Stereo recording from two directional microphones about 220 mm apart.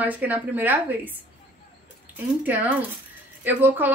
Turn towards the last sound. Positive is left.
turn(degrees=-10)  # may be behind; listen again after turning